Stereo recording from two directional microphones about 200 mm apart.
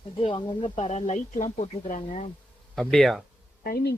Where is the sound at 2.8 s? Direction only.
Centre (ahead or behind).